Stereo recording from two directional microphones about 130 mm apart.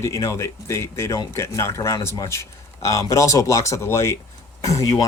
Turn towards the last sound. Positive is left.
turn(degrees=25)  # may be behind; listen again after turning